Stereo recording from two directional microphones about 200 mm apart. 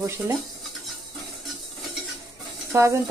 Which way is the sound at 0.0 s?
15° right (ahead or behind).